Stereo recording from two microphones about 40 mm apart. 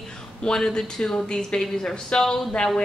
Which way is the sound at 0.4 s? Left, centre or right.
Centre.